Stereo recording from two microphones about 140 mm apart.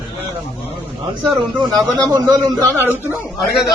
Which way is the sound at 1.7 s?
25° right (ahead or behind).